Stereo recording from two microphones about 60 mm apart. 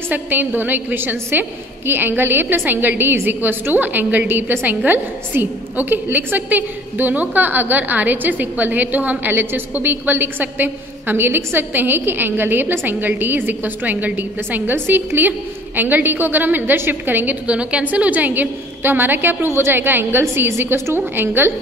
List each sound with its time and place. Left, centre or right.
0.1 s a woman's voice: right
17.5 s a woman's voice: centre; by 21.5 s right